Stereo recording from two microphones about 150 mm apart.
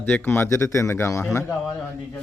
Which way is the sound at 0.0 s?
15° left (ahead or behind).